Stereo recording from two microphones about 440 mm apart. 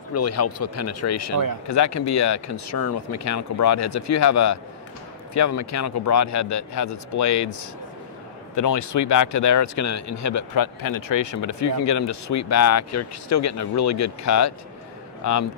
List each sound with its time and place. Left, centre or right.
0.1 s speech: left
8.5 s speech: left